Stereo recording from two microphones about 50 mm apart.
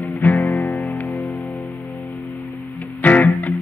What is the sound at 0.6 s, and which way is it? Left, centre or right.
Music, left.